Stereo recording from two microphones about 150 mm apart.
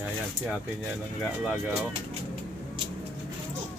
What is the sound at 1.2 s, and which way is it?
Speech, centre (ahead or behind).